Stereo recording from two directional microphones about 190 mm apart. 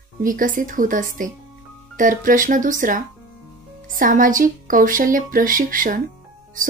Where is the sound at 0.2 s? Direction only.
45° right (ahead or behind).